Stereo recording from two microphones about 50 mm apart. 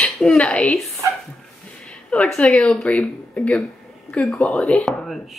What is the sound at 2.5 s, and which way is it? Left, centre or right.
Speech, left.